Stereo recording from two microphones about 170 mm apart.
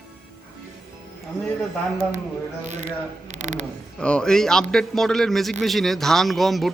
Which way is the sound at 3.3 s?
45° right (ahead or behind).